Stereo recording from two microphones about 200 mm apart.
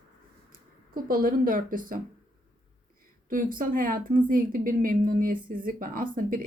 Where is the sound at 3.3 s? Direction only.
45° right (ahead or behind).